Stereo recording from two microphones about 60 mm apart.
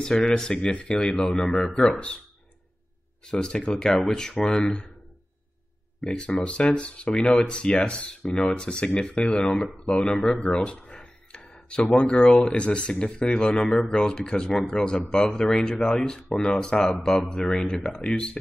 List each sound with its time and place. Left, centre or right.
0.0 s speech: centre
3.3 s speech: centre
5.9 s speech: centre
6.2 s speech: centre